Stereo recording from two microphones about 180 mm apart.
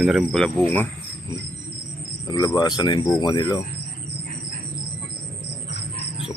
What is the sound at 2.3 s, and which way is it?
Speech, 20° left (ahead or behind).